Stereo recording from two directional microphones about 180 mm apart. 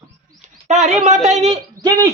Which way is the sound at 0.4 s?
40° right (ahead or behind).